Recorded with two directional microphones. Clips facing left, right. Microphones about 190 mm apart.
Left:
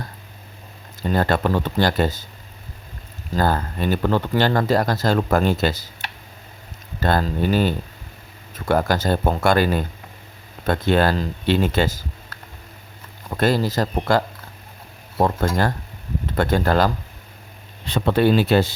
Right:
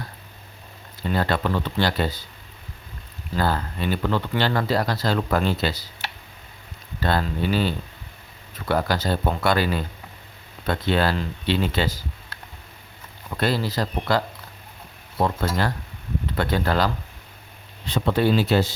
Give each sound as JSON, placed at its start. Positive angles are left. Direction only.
{"t": 1.0, "sound": "speech", "side_deg": 45}
{"t": 3.3, "sound": "speech", "side_deg": 45}
{"t": 7.0, "sound": "speech", "side_deg": 45}
{"t": 13.3, "sound": "speech", "side_deg": 45}
{"t": 16.3, "sound": "speech", "side_deg": 45}